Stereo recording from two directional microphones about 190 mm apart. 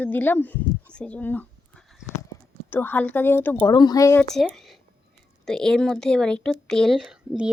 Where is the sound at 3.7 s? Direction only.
20° left (ahead or behind).